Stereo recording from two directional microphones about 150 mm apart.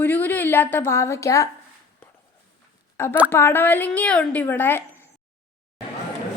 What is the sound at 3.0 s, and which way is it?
A woman's voice, 15° left (ahead or behind).